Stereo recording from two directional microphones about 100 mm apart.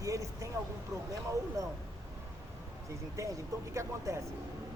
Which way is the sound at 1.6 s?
35° right (ahead or behind).